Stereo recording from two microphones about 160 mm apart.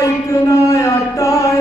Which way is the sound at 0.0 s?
20° left (ahead or behind).